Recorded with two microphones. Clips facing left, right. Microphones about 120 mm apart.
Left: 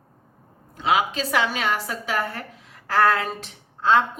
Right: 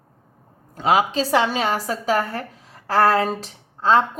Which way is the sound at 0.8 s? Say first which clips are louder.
Right 3 dB; 40° right (ahead or behind).